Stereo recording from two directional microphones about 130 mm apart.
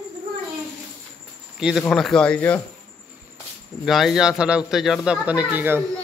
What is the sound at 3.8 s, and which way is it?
Speech, centre (ahead or behind).